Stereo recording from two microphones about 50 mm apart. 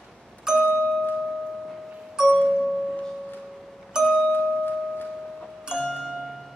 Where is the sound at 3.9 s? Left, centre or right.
Centre.